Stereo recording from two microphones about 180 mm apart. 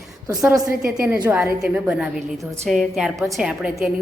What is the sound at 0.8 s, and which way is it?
A woman's voice, 5° right (ahead or behind).